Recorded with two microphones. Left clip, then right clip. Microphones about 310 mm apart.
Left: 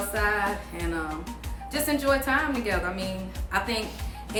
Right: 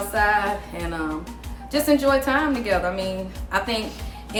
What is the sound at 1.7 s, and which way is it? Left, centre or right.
A woman's voice, centre.